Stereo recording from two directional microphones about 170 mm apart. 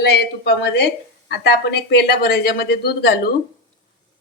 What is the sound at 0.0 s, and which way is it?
Speech, 70° left (ahead or behind).